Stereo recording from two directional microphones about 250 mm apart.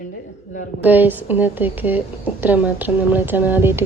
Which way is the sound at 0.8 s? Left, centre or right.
Centre.